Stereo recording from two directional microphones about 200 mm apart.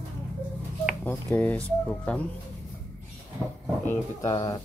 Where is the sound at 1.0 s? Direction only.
10° left (ahead or behind).